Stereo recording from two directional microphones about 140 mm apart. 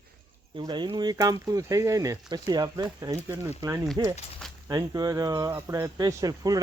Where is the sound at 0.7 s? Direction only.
35° right (ahead or behind).